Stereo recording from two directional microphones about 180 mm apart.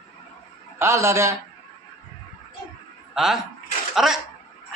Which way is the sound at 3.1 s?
Centre (ahead or behind).